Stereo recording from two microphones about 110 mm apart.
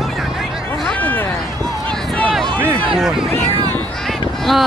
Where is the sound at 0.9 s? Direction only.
15° left (ahead or behind).